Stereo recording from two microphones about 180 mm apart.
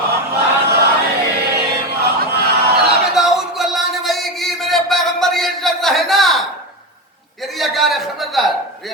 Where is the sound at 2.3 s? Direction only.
65° right (ahead or behind).